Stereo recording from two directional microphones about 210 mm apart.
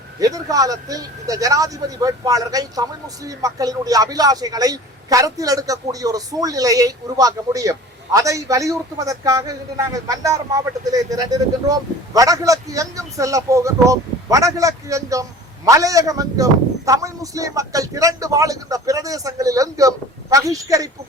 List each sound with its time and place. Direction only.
0.2 s speech: 15° right (ahead or behind)